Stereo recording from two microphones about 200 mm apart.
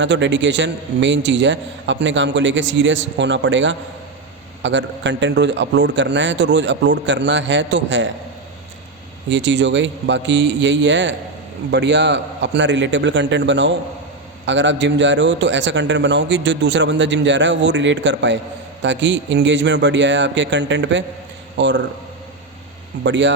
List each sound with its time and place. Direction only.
0.0 s a man's voice: 65° right (ahead or behind)
9.3 s a man's voice: 65° right (ahead or behind)
23.0 s a man's voice: 65° right (ahead or behind)